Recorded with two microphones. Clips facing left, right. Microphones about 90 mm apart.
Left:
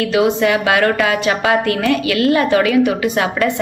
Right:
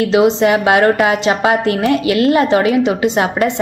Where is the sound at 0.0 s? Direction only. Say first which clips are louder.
Right 3 dB; 25° right (ahead or behind).